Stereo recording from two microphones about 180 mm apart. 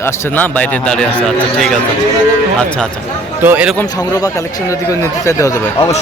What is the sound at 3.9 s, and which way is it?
Speech, 20° left (ahead or behind).